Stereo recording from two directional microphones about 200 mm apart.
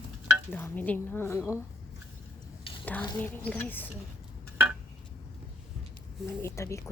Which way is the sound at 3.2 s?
5° left (ahead or behind).